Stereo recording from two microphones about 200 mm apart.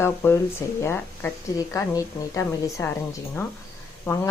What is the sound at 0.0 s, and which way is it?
A woman's voice, 10° left (ahead or behind).